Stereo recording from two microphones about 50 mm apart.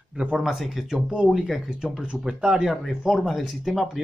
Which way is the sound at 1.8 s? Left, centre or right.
Centre.